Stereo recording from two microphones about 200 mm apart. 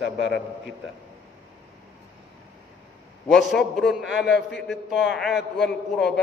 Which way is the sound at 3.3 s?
Centre (ahead or behind).